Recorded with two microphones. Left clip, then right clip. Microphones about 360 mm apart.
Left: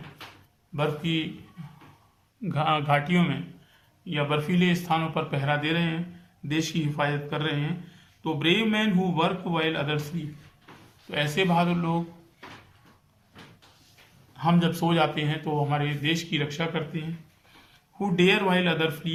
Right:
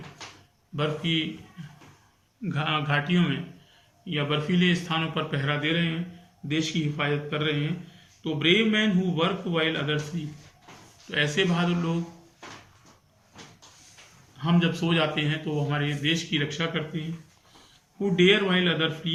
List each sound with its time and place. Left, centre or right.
0.8 s a man's voice: centre
2.5 s a man's voice: centre
14.3 s a man's voice: centre
18.2 s a man's voice: centre